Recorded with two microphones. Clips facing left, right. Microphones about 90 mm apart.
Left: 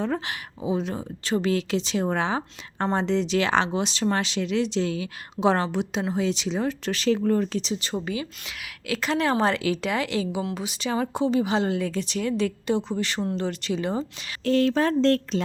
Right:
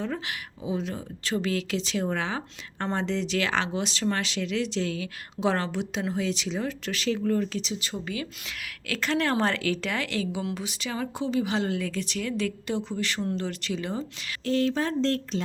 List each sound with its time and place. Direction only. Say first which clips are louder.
0.0 s speech: left 4 dB; 30° left (ahead or behind)
8.0 s speech: left 3 dB; 20° left (ahead or behind)
8.4 s a woman's voice: left 4 dB; 10° left (ahead or behind); by 14.3 s 25° left (ahead or behind)
14.4 s speech: left 4 dB; 60° left (ahead or behind)